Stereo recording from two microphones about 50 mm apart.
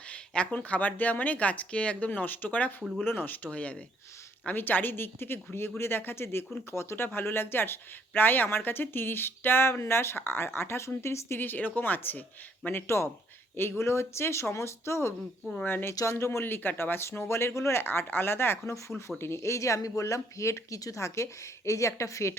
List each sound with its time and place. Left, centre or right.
0.1 s speech: left
3.0 s speech: left
4.5 s speech: left
11.3 s speech: left
13.6 s speech: left
15.6 s speech: left
15.9 s speech: left
16.4 s speech: left
19.2 s speech: left